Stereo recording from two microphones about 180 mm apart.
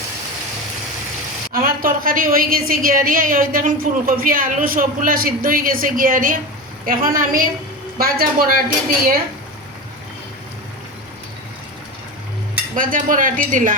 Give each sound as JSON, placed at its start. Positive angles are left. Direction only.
{"t": 1.5, "sound": "a woman's voice", "side_deg": -50}
{"t": 12.7, "sound": "a woman's voice", "side_deg": -50}